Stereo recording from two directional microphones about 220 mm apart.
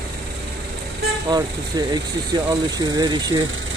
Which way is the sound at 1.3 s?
15° right (ahead or behind).